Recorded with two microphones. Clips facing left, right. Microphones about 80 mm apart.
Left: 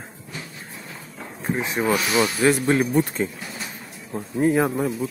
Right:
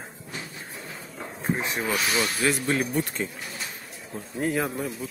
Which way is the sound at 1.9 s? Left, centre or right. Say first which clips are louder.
Left 6 dB; left.